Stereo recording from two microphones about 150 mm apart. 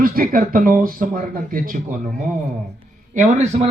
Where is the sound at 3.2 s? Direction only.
50° right (ahead or behind).